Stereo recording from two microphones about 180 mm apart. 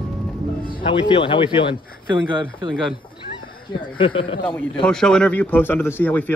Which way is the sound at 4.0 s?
30° left (ahead or behind).